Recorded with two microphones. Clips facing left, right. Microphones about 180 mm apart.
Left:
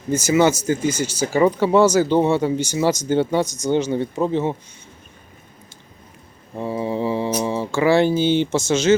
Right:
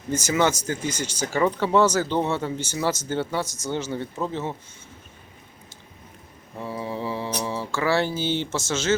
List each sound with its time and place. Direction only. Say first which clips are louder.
0.1 s speech: left 6 dB; 10° left (ahead or behind)
6.6 s mantra: left 7 dB; 20° left (ahead or behind)